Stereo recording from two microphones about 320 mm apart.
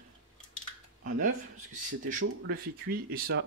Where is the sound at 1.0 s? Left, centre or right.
Right.